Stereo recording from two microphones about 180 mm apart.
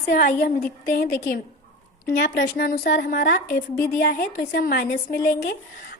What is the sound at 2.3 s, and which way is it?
A woman's voice, 60° left (ahead or behind).